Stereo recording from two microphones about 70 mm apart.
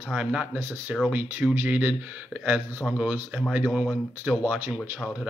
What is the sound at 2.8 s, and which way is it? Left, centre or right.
Speech, centre.